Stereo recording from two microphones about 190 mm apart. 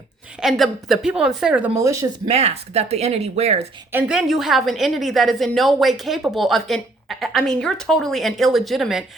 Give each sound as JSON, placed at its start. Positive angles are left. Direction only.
{"t": 0.3, "sound": "a woman's voice", "side_deg": 0}
{"t": 2.2, "sound": "speech", "side_deg": -35}
{"t": 3.9, "sound": "a woman's voice", "side_deg": -5}